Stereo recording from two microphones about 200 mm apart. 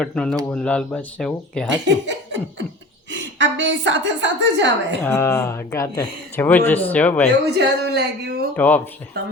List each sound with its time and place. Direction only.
0.0 s speech: 5° left (ahead or behind)
2.0 s beatboxing: 65° right (ahead or behind)
3.1 s a woman's voice: 65° right (ahead or behind)
5.0 s speech: 15° left (ahead or behind)
7.6 s speech: 55° right (ahead or behind)
8.5 s speech: 10° left (ahead or behind)